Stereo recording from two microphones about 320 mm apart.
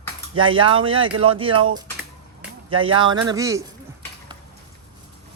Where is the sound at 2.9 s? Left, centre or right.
Right.